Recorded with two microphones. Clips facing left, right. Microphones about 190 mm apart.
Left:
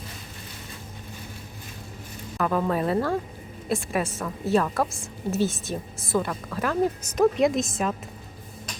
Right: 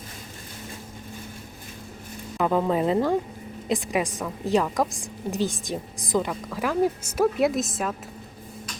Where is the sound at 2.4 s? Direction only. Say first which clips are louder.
Right 2 dB; 20° right (ahead or behind); by 7.9 s centre (ahead or behind).